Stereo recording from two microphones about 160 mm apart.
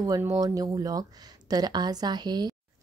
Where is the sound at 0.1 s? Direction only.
25° right (ahead or behind).